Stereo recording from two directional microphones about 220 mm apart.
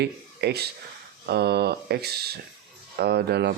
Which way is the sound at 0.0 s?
50° right (ahead or behind).